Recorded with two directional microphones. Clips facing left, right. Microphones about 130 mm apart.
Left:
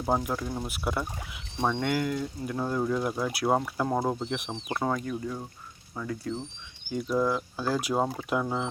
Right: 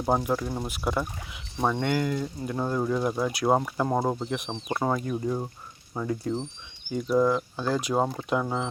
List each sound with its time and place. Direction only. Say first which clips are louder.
0.2 s speech: right 3 dB; 5° right (ahead or behind)
5.0 s speech: right 5 dB; 25° right (ahead or behind)
6.9 s speech: right 4 dB; centre (ahead or behind)